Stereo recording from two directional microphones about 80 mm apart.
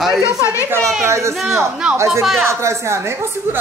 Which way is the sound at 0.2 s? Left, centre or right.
Left.